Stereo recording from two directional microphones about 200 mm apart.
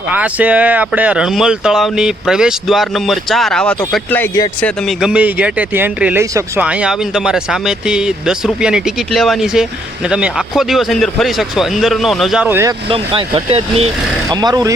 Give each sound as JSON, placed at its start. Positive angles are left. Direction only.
{"t": 0.1, "sound": "speech", "side_deg": -5}
{"t": 12.9, "sound": "speech", "side_deg": -25}
{"t": 14.4, "sound": "speech", "side_deg": -20}